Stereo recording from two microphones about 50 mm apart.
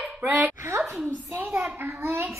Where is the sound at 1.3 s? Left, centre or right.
Right.